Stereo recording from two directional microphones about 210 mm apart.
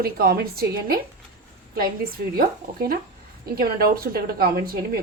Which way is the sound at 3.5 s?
45° right (ahead or behind).